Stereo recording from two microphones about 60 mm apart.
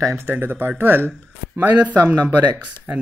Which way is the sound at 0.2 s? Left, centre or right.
Right.